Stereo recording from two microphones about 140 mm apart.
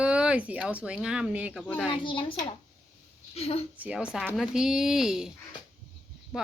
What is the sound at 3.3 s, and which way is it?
Speech, 45° left (ahead or behind).